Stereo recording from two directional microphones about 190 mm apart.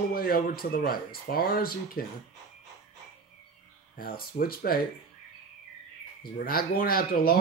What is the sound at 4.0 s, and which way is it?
Speech, 50° left (ahead or behind).